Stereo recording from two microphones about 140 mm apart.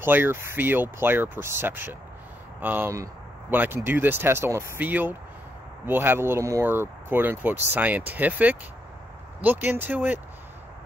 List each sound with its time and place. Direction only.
0.0 s speech: 15° right (ahead or behind)